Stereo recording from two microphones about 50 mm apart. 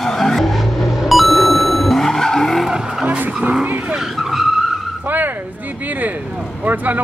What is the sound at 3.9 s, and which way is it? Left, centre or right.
Vehicle, centre.